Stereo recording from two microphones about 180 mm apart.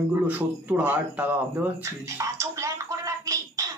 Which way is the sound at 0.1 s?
10° right (ahead or behind).